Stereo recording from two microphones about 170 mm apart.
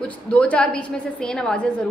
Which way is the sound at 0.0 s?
5° left (ahead or behind).